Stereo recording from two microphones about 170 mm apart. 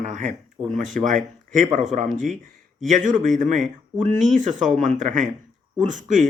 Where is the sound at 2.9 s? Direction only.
50° right (ahead or behind).